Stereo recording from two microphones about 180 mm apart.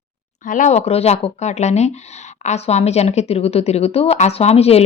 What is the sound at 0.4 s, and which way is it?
Speech, 45° left (ahead or behind).